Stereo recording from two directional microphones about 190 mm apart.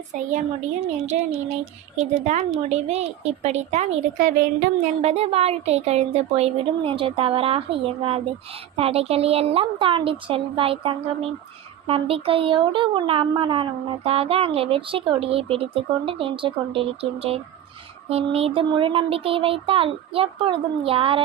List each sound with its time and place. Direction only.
0.1 s speech: 40° right (ahead or behind)
5.0 s speech: 35° right (ahead or behind)